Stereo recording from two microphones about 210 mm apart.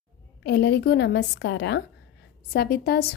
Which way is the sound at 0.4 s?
50° left (ahead or behind).